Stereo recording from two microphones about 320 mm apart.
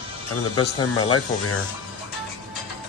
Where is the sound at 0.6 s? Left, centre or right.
Left.